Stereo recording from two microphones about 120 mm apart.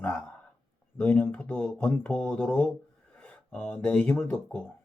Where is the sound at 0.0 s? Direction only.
15° left (ahead or behind).